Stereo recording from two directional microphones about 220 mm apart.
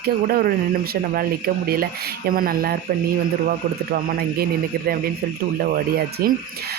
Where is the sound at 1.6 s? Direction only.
40° right (ahead or behind).